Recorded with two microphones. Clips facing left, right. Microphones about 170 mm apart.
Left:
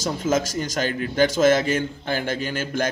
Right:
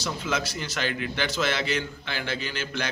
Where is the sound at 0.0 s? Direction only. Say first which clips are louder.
Left 7 dB; 45° left (ahead or behind).